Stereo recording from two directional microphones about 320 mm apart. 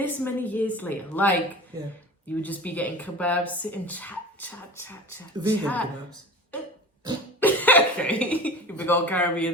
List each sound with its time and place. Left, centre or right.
0.0 s speech: centre
2.4 s speech: centre
7.3 s cough: centre